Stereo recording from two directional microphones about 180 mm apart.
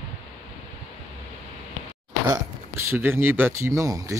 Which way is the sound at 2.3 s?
15° right (ahead or behind).